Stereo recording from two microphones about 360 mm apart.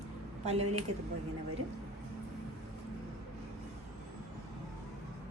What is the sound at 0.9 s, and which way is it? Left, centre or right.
Speech, right.